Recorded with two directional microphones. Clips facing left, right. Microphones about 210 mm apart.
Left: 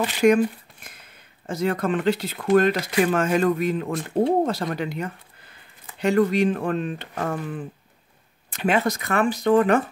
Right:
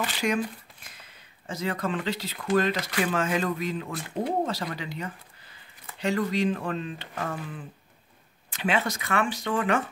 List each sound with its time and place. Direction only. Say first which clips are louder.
0.2 s speech: left 11 dB; 55° left (ahead or behind)
1.5 s speech: left 6 dB; 55° left (ahead or behind)
8.6 s speech: left 5 dB; 40° left (ahead or behind)